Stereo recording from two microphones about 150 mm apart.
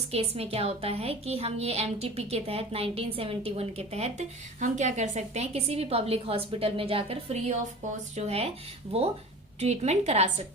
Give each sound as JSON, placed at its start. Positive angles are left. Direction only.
{"t": 0.1, "sound": "a woman's voice", "side_deg": -40}
{"t": 9.6, "sound": "a woman's voice", "side_deg": -45}